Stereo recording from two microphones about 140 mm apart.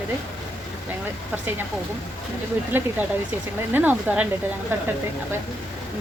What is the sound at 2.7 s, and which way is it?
Speech, 15° right (ahead or behind).